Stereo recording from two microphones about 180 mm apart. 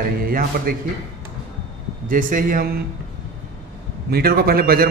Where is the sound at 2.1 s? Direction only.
50° right (ahead or behind).